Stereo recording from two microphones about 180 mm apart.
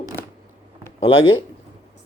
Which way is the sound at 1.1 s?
90° left.